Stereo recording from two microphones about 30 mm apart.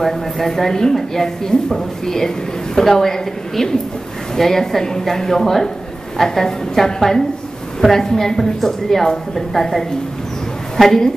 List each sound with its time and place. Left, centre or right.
0.0 s a woman's voice: centre